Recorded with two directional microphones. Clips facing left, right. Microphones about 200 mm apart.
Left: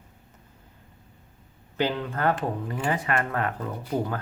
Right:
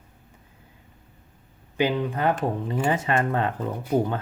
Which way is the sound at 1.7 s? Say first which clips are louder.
Right 3 dB; 10° right (ahead or behind).